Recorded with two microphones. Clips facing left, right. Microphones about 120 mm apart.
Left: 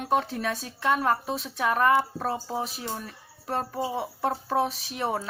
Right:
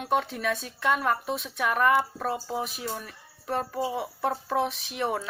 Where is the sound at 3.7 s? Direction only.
25° left (ahead or behind).